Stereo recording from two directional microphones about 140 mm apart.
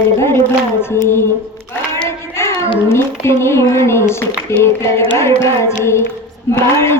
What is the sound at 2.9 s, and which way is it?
A woman's voice, 20° left (ahead or behind).